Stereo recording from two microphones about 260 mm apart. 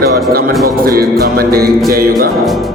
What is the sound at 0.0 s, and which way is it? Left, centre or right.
Speech, right.